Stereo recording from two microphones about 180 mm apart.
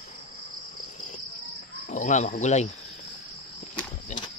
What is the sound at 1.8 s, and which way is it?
Speech, 40° left (ahead or behind).